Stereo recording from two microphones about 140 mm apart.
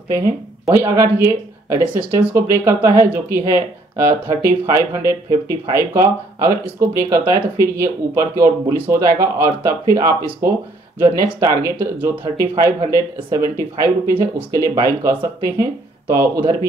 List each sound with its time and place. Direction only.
0.7 s speech: 20° right (ahead or behind)